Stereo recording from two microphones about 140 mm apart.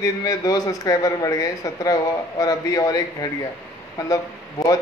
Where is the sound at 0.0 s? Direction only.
25° left (ahead or behind).